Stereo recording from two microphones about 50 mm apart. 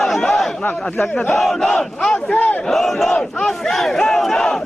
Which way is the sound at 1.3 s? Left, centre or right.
Centre.